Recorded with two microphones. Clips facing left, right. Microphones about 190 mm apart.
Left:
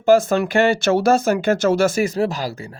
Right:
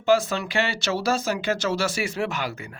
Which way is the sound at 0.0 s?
45° left (ahead or behind).